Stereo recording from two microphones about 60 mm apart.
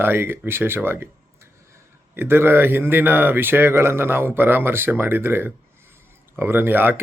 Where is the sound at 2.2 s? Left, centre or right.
Right.